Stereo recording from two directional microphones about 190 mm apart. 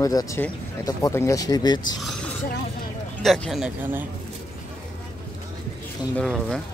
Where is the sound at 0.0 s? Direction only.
20° left (ahead or behind).